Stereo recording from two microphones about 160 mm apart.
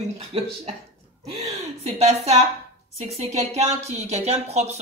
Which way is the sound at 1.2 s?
40° right (ahead or behind).